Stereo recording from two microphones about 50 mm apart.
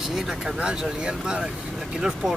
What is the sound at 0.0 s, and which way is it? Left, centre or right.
Speech, centre.